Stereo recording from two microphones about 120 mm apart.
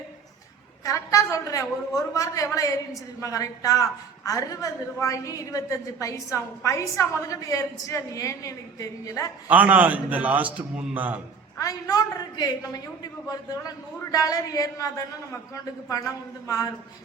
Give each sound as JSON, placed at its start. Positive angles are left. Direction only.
{"t": 0.9, "sound": "a woman's voice", "side_deg": 25}
{"t": 9.5, "sound": "a man's voice", "side_deg": -15}
{"t": 11.5, "sound": "a woman's voice", "side_deg": 30}